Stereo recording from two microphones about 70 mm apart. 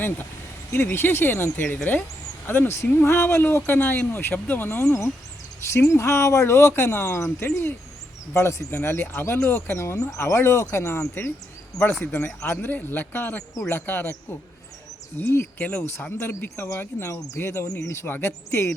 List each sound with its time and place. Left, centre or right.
0.7 s speech: left
12.1 s speech: left
16.2 s speech: left
17.1 s speech: left
17.3 s speech: left